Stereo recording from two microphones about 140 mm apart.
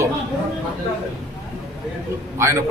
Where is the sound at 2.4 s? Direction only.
20° right (ahead or behind).